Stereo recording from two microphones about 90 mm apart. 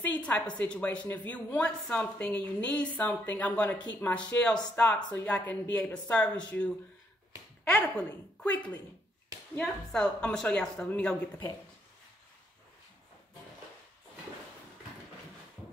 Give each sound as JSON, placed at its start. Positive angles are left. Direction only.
{"t": 0.0, "sound": "a woman's voice", "side_deg": 15}